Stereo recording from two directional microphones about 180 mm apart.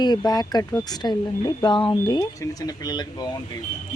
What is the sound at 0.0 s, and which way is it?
Speech, 20° left (ahead or behind).